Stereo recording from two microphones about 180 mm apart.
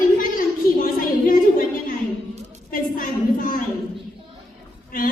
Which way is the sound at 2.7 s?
50° left (ahead or behind).